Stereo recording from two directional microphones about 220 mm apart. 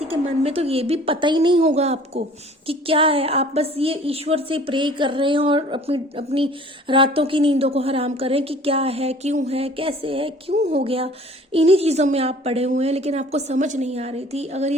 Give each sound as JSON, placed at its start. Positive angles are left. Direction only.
{"t": 0.0, "sound": "speech", "side_deg": -25}